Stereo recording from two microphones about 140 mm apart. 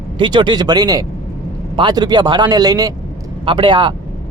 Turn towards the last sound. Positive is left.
turn(degrees=-35)  # may be behind; listen again after turning